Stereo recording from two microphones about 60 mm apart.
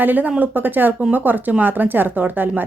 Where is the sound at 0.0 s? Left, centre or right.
Right.